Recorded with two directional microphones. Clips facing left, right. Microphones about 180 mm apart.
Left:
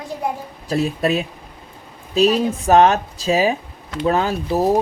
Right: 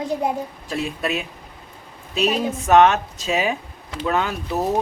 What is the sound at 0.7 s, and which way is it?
Speech, 40° left (ahead or behind).